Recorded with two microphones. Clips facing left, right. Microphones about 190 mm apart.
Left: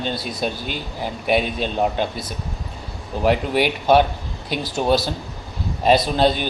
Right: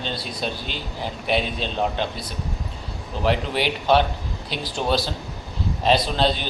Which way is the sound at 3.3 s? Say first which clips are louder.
Left 4 dB; 50° left (ahead or behind).